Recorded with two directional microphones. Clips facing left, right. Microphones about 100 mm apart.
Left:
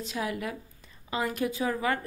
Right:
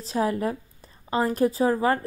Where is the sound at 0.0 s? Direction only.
35° right (ahead or behind).